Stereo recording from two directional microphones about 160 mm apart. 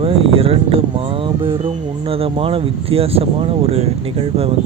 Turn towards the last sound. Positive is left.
turn(degrees=-40)  # may be behind; listen again after turning